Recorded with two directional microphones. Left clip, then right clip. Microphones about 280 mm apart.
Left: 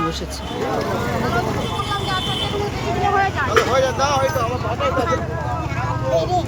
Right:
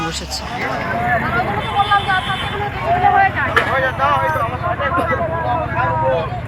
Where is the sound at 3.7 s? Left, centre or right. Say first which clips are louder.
Right 2 dB; left.